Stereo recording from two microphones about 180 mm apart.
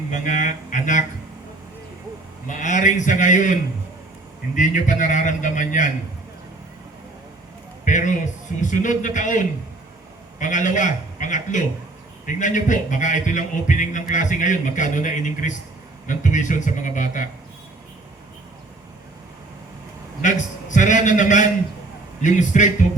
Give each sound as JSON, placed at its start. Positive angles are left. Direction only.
{"t": 0.1, "sound": "a man's voice", "side_deg": 45}
{"t": 2.5, "sound": "a man's voice", "side_deg": 45}
{"t": 7.9, "sound": "a man's voice", "side_deg": 45}
{"t": 20.2, "sound": "a man's voice", "side_deg": 45}